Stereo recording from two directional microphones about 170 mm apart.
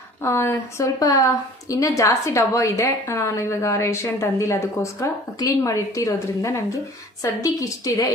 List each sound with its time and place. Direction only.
0.2 s a woman's voice: 15° left (ahead or behind)